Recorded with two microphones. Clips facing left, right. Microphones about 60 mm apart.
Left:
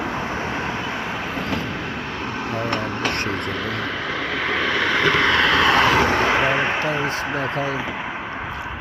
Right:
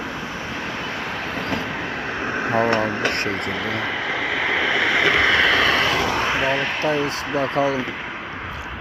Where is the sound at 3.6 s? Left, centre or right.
Centre.